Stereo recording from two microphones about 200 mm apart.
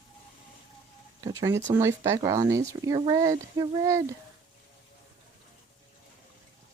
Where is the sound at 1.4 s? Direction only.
15° right (ahead or behind).